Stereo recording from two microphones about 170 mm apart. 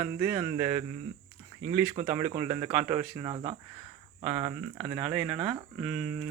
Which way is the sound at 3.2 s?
30° right (ahead or behind).